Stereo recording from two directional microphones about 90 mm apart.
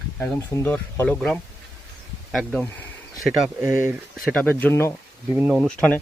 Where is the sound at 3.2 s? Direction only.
Centre (ahead or behind).